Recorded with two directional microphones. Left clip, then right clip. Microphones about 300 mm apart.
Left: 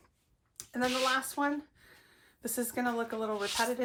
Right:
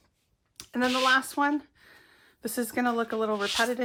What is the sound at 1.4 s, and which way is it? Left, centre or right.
Speech, right.